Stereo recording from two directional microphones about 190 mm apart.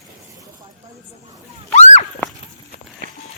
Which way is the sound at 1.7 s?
35° left (ahead or behind).